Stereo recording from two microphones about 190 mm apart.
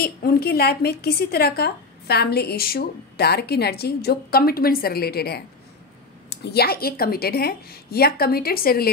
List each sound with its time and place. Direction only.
0.0 s a woman's voice: 55° left (ahead or behind)